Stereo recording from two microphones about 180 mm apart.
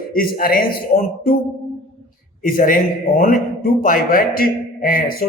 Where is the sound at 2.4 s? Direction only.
50° left (ahead or behind).